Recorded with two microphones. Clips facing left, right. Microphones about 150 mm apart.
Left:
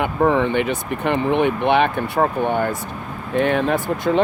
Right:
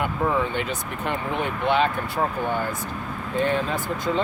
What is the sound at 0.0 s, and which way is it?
Speech, 70° left (ahead or behind).